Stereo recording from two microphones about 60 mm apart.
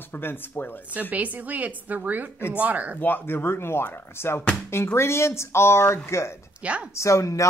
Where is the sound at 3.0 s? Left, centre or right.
Left.